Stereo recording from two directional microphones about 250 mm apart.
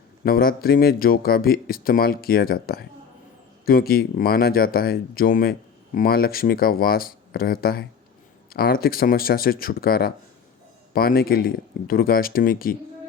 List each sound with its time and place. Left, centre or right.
0.3 s speech: left